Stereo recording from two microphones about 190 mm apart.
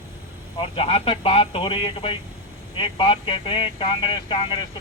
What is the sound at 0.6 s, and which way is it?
Speech, 30° left (ahead or behind).